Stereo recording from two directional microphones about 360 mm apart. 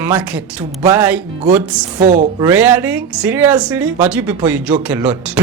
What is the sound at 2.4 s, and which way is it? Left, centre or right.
Speech, centre.